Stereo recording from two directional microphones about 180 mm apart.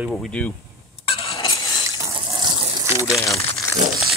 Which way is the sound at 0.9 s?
35° left (ahead or behind).